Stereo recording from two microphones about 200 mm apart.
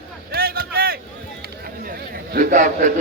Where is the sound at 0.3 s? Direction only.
50° right (ahead or behind).